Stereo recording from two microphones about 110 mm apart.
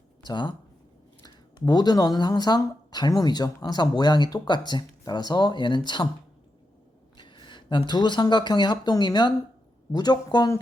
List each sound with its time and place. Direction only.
0.3 s speech: 45° left (ahead or behind)
7.2 s speech: 45° left (ahead or behind)